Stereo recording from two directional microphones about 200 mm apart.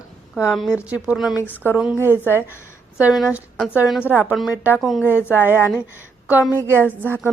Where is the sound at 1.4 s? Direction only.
10° left (ahead or behind).